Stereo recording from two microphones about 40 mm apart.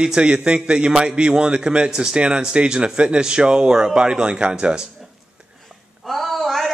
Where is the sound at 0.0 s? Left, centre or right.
Right.